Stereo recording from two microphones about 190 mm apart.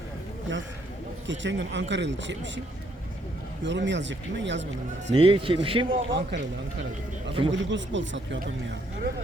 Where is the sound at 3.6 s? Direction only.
70° right (ahead or behind).